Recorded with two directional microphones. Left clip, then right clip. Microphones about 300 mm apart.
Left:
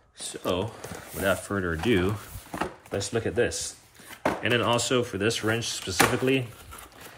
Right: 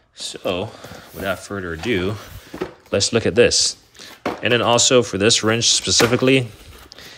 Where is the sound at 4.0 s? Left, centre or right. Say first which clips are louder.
Right 7 dB; right.